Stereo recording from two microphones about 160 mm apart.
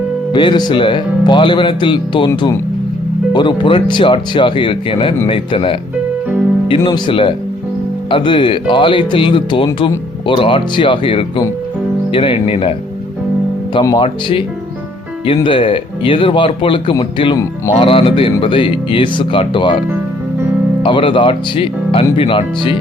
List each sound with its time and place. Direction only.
0.3 s speech: 30° left (ahead or behind)
13.8 s speech: 30° left (ahead or behind)
15.4 s speech: 35° left (ahead or behind)
20.8 s speech: 30° left (ahead or behind)